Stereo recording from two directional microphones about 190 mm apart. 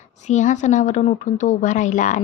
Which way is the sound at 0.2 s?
40° left (ahead or behind).